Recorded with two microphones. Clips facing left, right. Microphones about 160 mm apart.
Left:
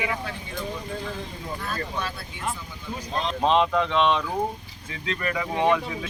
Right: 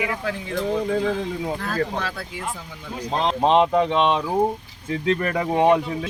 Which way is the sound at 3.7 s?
45° right (ahead or behind).